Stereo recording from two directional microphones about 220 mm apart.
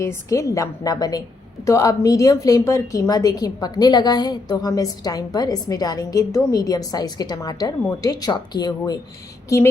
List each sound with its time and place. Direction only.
0.0 s a woman's voice: 15° left (ahead or behind)